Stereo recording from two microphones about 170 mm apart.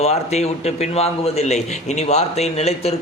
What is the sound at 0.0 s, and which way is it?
A man's voice, 40° left (ahead or behind).